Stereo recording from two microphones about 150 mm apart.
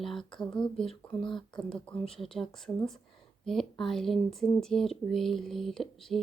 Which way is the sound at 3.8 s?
Centre (ahead or behind).